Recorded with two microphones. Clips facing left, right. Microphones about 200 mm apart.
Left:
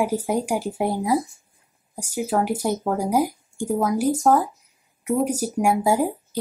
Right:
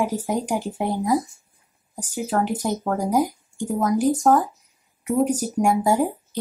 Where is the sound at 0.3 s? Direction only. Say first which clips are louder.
Left 1 dB; 10° left (ahead or behind).